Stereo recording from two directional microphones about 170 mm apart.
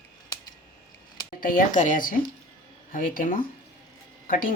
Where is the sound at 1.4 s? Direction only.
50° left (ahead or behind).